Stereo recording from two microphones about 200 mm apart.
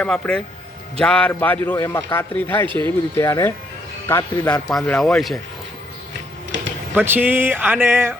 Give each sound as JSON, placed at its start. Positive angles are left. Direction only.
{"t": 0.0, "sound": "a man's voice", "side_deg": 5}
{"t": 2.6, "sound": "speech", "side_deg": -25}
{"t": 3.2, "sound": "a man's voice", "side_deg": 15}
{"t": 4.7, "sound": "speech", "side_deg": 0}
{"t": 6.9, "sound": "speech", "side_deg": -10}